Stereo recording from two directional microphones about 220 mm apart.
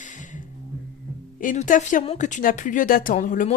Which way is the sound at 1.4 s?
35° left (ahead or behind).